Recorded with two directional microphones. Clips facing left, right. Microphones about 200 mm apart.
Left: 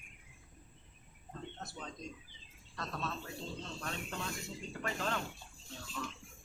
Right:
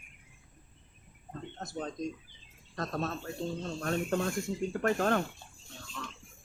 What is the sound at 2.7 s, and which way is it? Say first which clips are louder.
Speech: right 7 dB; 45° right (ahead or behind).